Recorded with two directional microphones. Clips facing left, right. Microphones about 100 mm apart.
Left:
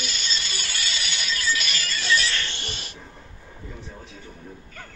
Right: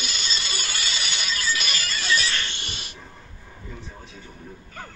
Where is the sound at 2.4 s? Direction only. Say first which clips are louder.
Left 1 dB; 35° left (ahead or behind).